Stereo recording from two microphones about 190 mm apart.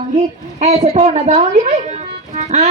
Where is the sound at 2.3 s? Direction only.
35° right (ahead or behind).